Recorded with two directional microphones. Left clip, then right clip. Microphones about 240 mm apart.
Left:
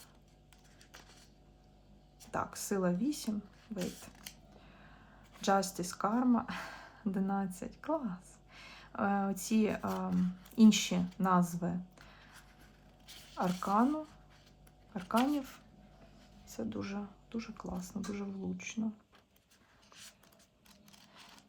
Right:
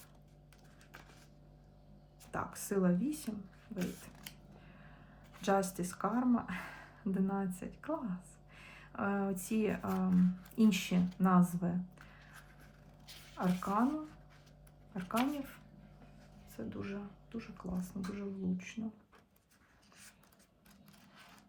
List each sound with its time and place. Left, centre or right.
2.3 s speech: centre
5.3 s speech: centre
13.1 s a sound: centre
14.9 s speech: centre
16.6 s speech: centre